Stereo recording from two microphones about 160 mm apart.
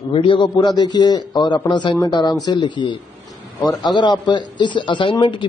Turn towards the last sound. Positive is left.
turn(degrees=30)  # may be behind; listen again after turning